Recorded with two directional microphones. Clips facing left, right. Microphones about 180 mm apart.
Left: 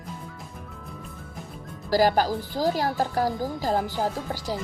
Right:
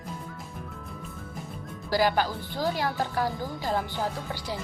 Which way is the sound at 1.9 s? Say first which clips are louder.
Left 4 dB; 40° left (ahead or behind).